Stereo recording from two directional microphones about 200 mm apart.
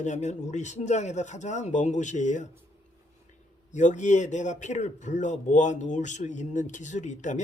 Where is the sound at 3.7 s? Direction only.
35° left (ahead or behind).